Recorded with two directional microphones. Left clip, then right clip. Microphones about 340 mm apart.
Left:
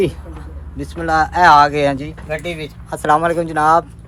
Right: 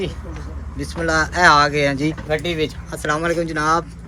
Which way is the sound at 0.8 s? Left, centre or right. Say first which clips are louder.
Left 3 dB; centre.